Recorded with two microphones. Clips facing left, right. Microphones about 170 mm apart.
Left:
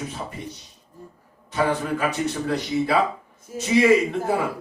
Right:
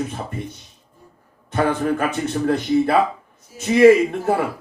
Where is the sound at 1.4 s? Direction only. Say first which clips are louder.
Right 4 dB; 50° right (ahead or behind).